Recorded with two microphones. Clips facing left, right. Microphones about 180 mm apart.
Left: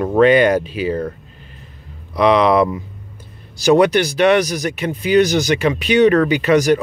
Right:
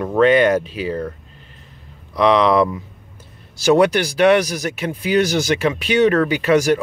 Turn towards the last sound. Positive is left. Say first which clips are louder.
# left 2 dB
turn(degrees=-5)  # may be behind; listen again after turning